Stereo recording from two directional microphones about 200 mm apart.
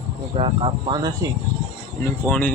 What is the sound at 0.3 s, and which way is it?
Speech, 25° right (ahead or behind).